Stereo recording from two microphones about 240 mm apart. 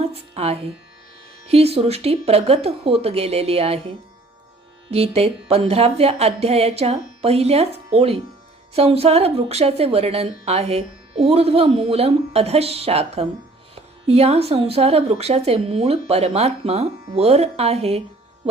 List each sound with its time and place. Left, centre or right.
0.0 s music: right
1.5 s speech: right